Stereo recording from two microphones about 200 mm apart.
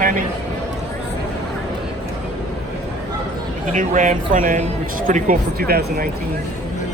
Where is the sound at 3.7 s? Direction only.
40° right (ahead or behind).